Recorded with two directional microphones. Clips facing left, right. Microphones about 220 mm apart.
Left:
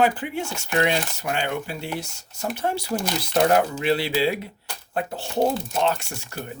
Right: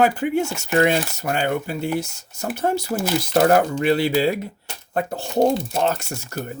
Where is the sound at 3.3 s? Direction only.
50° right (ahead or behind).